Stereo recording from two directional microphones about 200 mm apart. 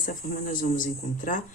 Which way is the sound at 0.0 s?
45° left (ahead or behind).